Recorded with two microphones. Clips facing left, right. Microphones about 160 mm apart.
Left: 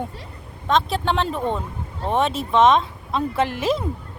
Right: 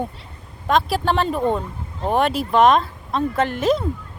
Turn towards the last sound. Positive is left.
turn(degrees=5)  # may be behind; listen again after turning